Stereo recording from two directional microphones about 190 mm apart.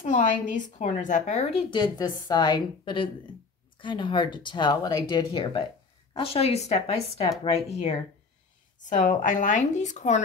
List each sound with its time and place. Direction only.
0.0 s a woman's voice: 40° left (ahead or behind)